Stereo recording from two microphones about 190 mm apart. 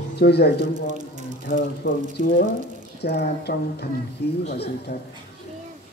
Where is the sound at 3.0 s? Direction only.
60° left (ahead or behind).